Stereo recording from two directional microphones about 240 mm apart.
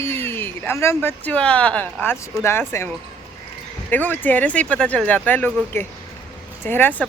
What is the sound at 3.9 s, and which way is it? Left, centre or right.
Speech, centre.